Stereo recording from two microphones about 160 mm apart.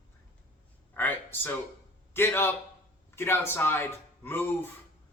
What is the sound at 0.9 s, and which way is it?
A man's voice, 10° left (ahead or behind).